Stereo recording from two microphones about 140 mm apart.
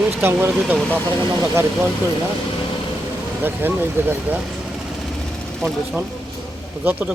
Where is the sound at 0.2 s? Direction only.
15° right (ahead or behind).